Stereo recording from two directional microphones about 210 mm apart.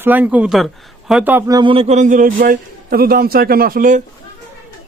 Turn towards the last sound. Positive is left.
turn(degrees=-40)  # may be behind; listen again after turning